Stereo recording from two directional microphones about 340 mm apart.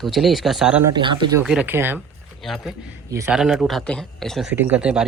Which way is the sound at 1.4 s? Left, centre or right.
Centre.